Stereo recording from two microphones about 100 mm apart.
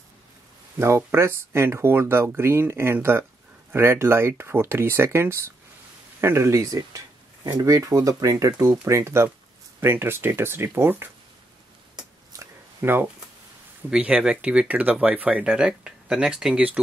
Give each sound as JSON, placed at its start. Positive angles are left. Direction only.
{"t": 0.7, "sound": "speech", "side_deg": -25}
{"t": 12.3, "sound": "a sound", "side_deg": -35}
{"t": 13.8, "sound": "speech", "side_deg": -10}